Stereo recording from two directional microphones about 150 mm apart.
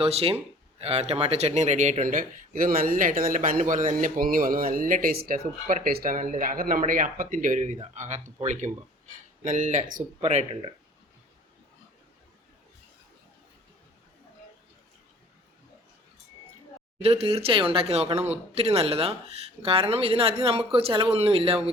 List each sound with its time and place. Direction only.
0.0 s speech: 40° right (ahead or behind)
9.4 s speech: 55° right (ahead or behind)
17.0 s speech: 45° right (ahead or behind)